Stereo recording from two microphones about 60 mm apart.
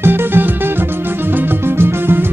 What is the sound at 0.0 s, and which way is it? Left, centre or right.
Music, right.